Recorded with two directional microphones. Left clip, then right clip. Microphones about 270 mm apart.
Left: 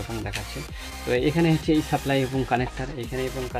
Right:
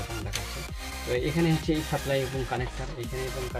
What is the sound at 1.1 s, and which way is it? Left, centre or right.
Speech, left.